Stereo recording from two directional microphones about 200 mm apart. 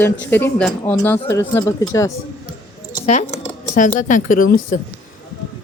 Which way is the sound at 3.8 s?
40° left (ahead or behind).